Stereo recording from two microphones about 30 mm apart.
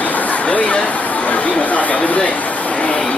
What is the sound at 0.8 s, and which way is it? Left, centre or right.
Chatter, left.